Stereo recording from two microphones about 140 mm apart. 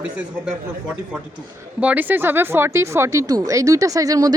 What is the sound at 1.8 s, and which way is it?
Speech, 10° right (ahead or behind).